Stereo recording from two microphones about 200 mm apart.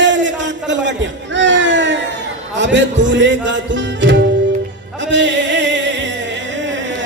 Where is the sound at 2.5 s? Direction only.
65° right (ahead or behind).